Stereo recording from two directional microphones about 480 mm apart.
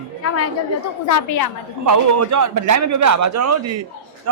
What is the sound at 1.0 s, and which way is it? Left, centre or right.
Speech, left.